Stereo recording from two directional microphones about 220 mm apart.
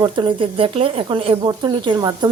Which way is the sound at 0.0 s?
20° right (ahead or behind).